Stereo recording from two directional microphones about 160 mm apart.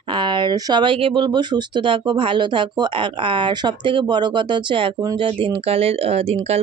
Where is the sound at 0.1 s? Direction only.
30° right (ahead or behind).